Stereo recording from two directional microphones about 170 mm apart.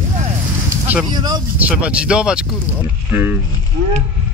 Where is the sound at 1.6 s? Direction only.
10° right (ahead or behind).